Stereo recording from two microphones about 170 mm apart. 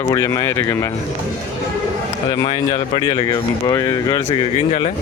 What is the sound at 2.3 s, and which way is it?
Speech, 25° left (ahead or behind).